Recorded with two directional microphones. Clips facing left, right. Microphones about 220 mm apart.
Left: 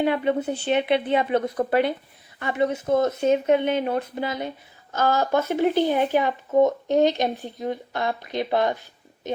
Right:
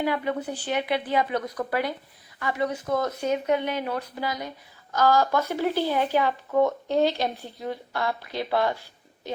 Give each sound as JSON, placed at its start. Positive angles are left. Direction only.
{"t": 0.0, "sound": "speech", "side_deg": 25}